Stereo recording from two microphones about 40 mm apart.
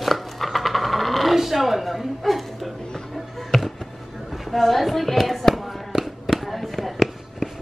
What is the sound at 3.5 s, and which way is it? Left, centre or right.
Basketball bounce, centre.